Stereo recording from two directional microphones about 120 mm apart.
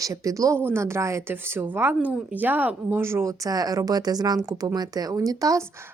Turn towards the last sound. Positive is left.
turn(degrees=-30)  # may be behind; listen again after turning